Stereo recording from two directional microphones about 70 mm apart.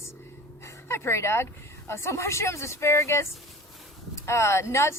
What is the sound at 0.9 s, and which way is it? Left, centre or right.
A woman's voice, left.